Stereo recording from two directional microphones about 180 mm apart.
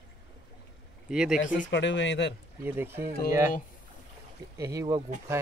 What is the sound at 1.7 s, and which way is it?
Speech, 90° left.